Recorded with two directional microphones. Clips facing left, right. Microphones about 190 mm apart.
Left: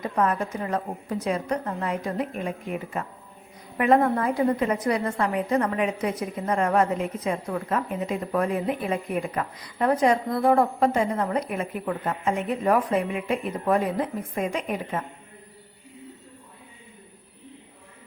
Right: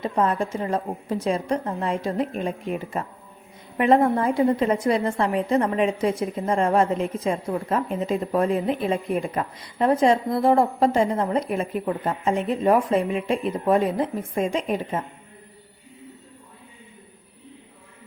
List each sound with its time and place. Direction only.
0.0 s a woman's voice: 25° right (ahead or behind)